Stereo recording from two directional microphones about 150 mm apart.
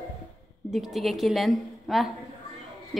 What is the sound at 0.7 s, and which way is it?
A woman's voice, centre (ahead or behind).